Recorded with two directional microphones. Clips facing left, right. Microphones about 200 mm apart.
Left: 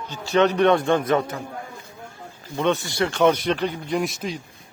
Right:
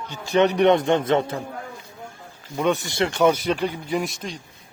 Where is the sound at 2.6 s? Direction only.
15° right (ahead or behind).